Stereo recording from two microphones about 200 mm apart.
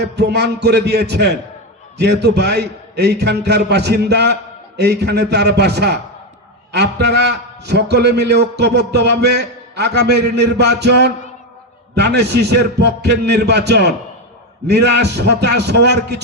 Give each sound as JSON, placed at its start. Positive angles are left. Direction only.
{"t": 0.0, "sound": "a man's voice", "side_deg": -55}